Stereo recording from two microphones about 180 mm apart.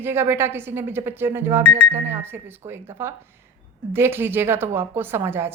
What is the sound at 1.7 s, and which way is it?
Speech, 40° right (ahead or behind).